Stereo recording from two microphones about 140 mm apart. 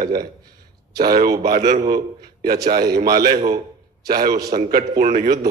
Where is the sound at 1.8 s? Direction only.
90° right.